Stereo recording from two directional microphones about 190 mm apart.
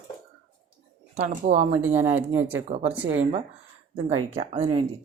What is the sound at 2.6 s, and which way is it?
Speech, 35° right (ahead or behind).